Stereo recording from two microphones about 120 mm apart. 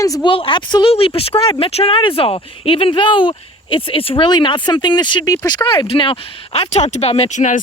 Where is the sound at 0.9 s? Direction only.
50° left (ahead or behind).